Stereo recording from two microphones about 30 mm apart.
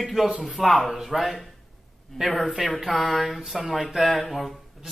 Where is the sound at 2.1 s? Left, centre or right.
Left.